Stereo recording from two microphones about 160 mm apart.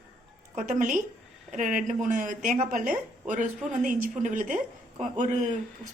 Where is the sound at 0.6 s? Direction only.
55° right (ahead or behind).